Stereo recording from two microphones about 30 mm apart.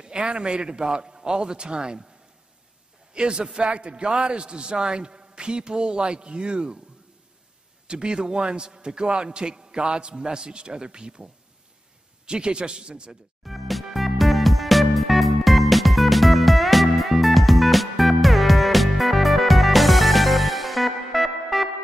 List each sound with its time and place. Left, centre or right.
0.0 s a man's voice: right
3.1 s a man's voice: right
7.8 s a man's voice: right
12.3 s a man's voice: right
13.4 s music: centre